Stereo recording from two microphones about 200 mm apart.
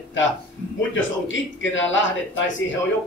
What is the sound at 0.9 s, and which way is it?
Speech, 70° left (ahead or behind).